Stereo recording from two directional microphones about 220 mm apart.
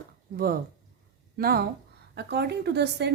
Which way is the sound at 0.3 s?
40° right (ahead or behind).